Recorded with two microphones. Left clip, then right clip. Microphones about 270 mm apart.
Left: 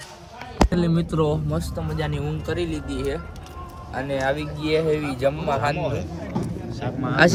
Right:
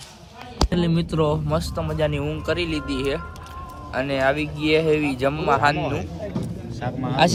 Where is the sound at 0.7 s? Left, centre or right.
Centre.